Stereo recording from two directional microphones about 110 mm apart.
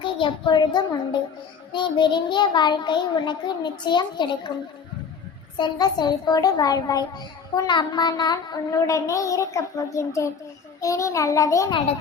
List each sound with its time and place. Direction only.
0.0 s a child's voice: 45° left (ahead or behind)
5.5 s a child's voice: 40° left (ahead or behind)